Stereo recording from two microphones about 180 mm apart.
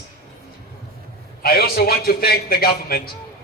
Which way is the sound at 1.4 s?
60° left (ahead or behind).